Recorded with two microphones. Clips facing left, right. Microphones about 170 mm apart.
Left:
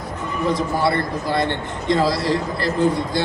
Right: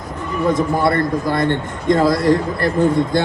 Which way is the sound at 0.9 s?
45° right (ahead or behind).